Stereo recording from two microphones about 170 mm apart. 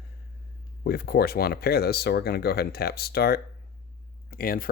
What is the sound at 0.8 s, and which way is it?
Speech, 65° left (ahead or behind).